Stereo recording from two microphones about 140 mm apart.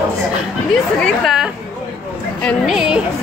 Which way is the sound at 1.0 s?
Centre (ahead or behind).